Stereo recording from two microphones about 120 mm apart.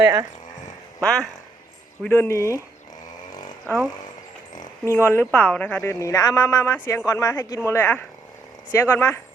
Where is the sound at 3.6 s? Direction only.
20° right (ahead or behind).